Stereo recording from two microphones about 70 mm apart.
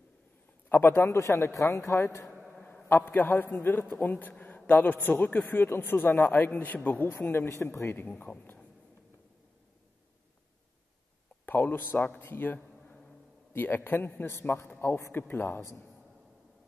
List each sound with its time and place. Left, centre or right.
0.7 s a man's voice: left
1.0 s speech: left
2.6 s a sound: left
3.1 s a man's voice: left
11.4 s a man's voice: left